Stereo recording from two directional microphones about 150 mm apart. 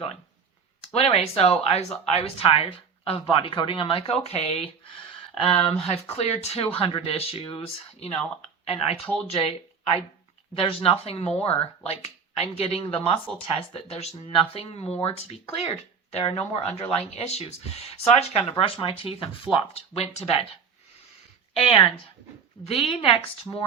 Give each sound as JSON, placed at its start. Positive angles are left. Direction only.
{"t": 0.9, "sound": "speech", "side_deg": 40}
{"t": 8.6, "sound": "speech", "side_deg": 40}
{"t": 21.5, "sound": "a woman's voice", "side_deg": 35}